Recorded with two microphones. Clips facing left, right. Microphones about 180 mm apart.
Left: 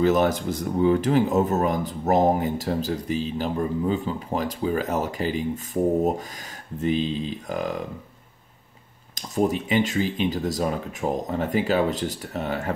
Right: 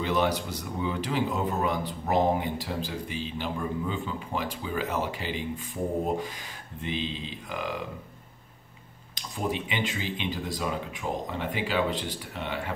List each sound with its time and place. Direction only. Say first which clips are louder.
0.0 s speech: left 6 dB; 45° left (ahead or behind)
6.8 s speech: left 9 dB; 40° left (ahead or behind)
9.1 s speech: left 8 dB; 45° left (ahead or behind)